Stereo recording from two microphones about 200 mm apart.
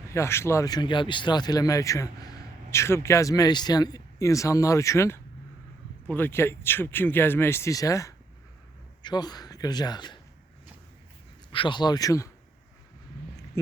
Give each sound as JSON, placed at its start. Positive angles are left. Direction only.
{"t": 0.1, "sound": "speech", "side_deg": 15}
{"t": 11.5, "sound": "speech", "side_deg": 25}